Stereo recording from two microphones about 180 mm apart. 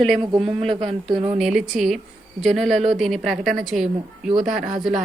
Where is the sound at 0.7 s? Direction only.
30° right (ahead or behind).